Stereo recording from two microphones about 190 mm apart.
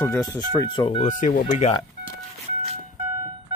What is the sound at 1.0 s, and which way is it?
Speech, 40° left (ahead or behind).